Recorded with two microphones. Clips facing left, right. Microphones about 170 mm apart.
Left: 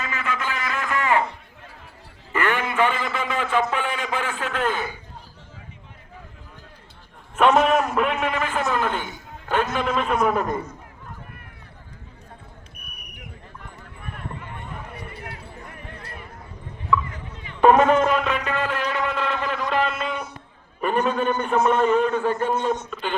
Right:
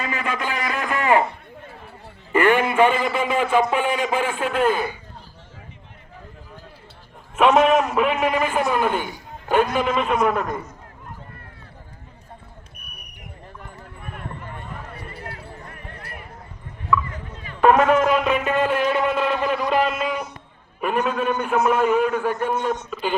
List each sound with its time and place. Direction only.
0.0 s a sound: 15° right (ahead or behind)
2.3 s a man's voice: 15° right (ahead or behind)
7.3 s a man's voice: 5° right (ahead or behind)
14.9 s a sound: 20° left (ahead or behind)
17.6 s music: 5° right (ahead or behind)
20.8 s a man's voice: centre (ahead or behind)